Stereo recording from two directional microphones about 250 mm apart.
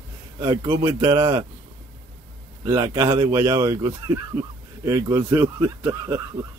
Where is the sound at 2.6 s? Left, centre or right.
Centre.